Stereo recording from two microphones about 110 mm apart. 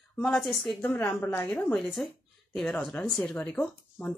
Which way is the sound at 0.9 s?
20° left (ahead or behind).